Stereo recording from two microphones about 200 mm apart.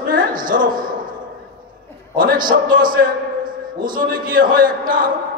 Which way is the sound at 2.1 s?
45° right (ahead or behind).